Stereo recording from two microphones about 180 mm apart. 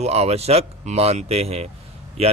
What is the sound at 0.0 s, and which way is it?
Speech, 35° right (ahead or behind).